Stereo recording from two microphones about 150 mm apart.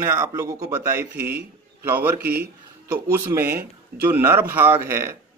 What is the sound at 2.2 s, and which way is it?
Speech, 90° right.